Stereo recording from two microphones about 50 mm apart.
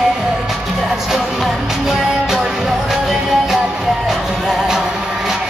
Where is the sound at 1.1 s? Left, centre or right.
Centre.